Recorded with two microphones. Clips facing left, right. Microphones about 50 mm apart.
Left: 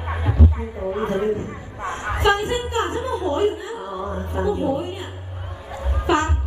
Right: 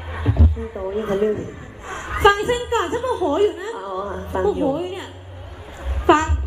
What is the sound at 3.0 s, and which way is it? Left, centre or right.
Speech, left.